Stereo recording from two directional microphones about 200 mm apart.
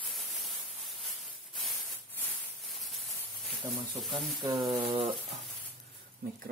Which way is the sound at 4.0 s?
Centre (ahead or behind).